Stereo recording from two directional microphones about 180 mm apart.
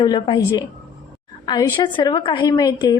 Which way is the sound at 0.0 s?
20° left (ahead or behind).